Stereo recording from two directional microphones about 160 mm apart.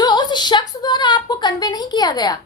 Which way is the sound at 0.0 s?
25° left (ahead or behind).